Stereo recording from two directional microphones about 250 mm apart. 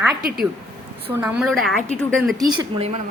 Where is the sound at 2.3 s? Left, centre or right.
Centre.